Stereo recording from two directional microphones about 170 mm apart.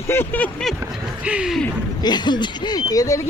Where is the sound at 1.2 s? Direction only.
5° right (ahead or behind).